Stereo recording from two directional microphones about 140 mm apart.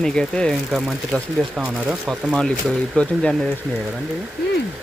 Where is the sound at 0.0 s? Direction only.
5° left (ahead or behind).